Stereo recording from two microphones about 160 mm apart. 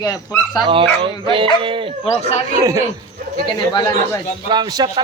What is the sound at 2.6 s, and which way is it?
Speech, 20° right (ahead or behind).